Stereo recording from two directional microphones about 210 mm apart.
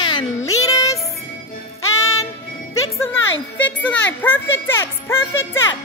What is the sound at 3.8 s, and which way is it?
Speech, 5° left (ahead or behind).